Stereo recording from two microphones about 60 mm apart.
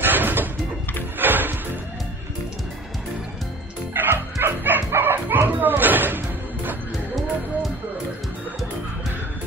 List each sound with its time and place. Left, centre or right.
0.0 s music: right
3.9 s bow-wow: right